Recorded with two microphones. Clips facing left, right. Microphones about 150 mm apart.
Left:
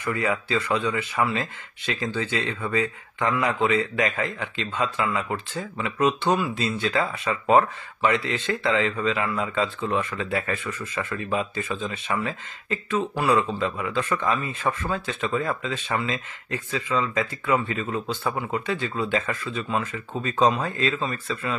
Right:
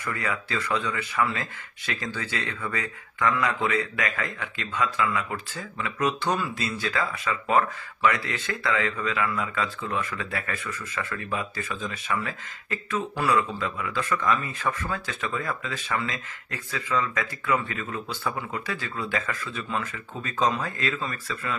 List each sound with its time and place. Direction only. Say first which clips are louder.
0.0 s speech: left 5 dB; 20° left (ahead or behind)
13.4 s speech: left 3 dB; 30° left (ahead or behind)